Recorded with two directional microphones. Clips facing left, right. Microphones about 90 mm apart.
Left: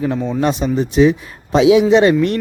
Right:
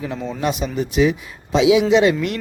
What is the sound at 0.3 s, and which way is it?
A man's voice, 40° left (ahead or behind).